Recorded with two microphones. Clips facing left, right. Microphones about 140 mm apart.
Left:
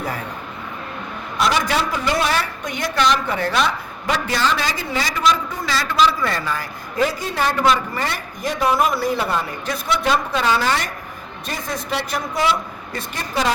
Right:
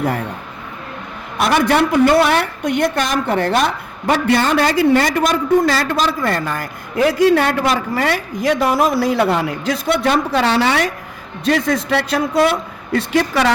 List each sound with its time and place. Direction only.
0.0 s a woman's voice: 60° right (ahead or behind)
1.4 s a woman's voice: 55° right (ahead or behind); by 9.7 s 80° right
9.9 s speech: 55° right (ahead or behind); by 13.5 s 75° right (ahead or behind)